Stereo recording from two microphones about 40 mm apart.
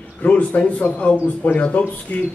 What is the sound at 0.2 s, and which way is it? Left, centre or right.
Speech, left.